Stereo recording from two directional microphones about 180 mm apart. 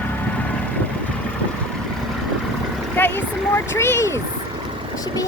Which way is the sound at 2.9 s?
10° left (ahead or behind).